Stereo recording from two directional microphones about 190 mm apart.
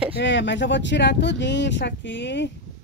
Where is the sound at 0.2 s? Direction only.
70° left (ahead or behind).